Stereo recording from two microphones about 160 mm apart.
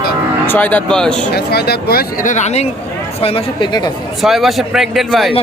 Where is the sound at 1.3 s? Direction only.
85° left.